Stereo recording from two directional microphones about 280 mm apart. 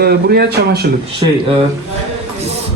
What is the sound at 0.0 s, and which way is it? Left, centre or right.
Speech, right.